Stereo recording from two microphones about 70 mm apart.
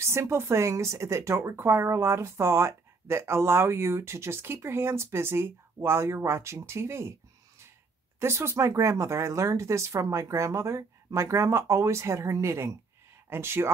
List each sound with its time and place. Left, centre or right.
0.0 s speech: right